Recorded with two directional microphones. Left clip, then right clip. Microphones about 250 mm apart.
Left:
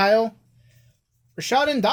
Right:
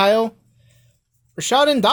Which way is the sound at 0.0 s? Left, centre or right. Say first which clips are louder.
Right 2 dB; right.